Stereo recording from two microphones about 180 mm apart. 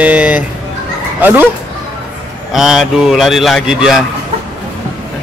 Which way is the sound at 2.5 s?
5° right (ahead or behind).